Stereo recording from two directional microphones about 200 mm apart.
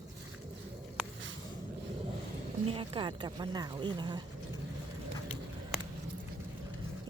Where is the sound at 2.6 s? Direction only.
25° right (ahead or behind).